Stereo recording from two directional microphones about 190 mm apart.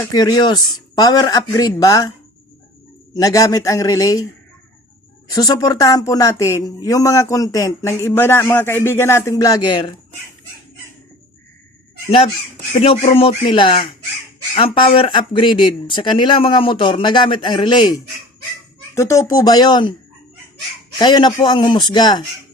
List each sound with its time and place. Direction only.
0.1 s speech: 20° left (ahead or behind)
3.2 s speech: 20° left (ahead or behind)
5.3 s speech: 20° left (ahead or behind)
12.8 s speech: 30° left (ahead or behind)
21.0 s speech: 25° left (ahead or behind)